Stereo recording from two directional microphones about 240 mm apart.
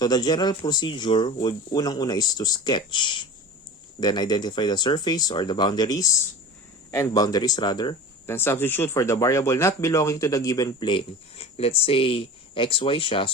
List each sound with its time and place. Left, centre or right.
0.0 s speech: centre